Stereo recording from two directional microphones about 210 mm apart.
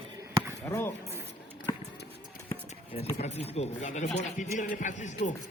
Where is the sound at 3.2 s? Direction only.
30° left (ahead or behind).